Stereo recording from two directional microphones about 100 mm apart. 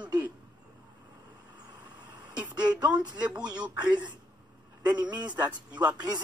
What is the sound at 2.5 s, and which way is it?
Speech, 45° right (ahead or behind).